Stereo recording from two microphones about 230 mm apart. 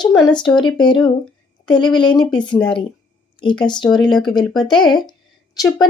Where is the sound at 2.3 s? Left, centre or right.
Centre.